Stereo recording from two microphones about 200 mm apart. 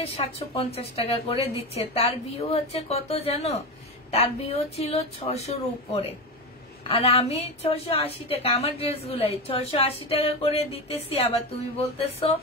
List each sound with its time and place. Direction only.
0.2 s a woman's voice: 30° left (ahead or behind)